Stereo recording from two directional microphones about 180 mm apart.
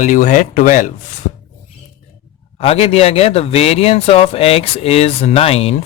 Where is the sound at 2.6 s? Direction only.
35° left (ahead or behind).